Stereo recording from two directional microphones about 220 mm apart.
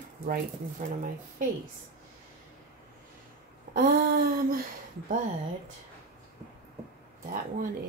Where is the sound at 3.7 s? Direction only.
40° right (ahead or behind).